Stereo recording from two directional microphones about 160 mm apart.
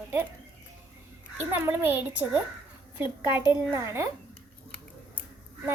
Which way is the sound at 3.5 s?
15° right (ahead or behind).